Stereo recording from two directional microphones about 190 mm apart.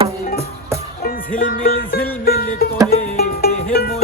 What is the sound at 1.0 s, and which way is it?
Music, 45° left (ahead or behind).